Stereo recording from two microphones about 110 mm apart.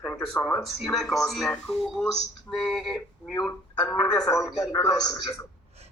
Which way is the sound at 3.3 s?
35° left (ahead or behind).